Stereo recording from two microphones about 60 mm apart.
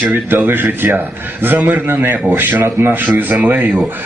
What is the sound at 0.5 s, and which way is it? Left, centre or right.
A man's voice, right.